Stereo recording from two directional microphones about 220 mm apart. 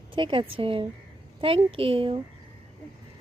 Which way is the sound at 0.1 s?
20° right (ahead or behind).